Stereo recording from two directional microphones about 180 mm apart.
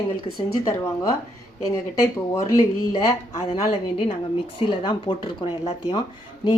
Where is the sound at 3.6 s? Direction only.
40° left (ahead or behind).